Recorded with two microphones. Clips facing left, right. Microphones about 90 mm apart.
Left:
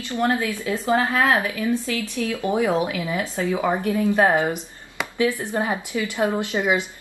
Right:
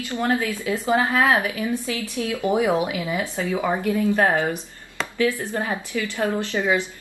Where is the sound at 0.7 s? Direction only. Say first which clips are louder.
Even; 15° right (ahead or behind).